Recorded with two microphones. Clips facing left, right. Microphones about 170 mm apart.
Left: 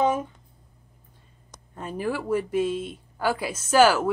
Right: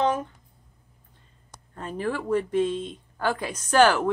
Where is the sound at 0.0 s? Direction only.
10° left (ahead or behind).